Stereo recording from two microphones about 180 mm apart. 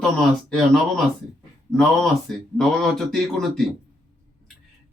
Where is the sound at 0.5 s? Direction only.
Centre (ahead or behind).